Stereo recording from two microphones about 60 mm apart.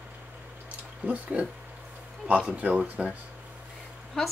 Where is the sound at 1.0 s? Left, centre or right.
Right.